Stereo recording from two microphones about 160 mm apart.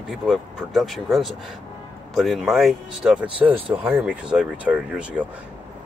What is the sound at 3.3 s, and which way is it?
Speech, 35° right (ahead or behind).